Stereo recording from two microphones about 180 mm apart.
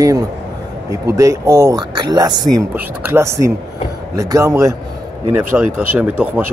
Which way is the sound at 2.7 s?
10° right (ahead or behind).